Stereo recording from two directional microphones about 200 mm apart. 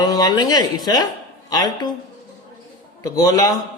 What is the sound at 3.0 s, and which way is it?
Speech, 15° left (ahead or behind).